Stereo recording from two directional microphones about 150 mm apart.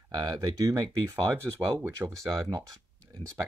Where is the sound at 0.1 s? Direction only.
30° right (ahead or behind).